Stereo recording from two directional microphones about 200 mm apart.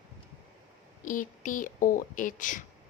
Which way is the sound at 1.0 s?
40° left (ahead or behind).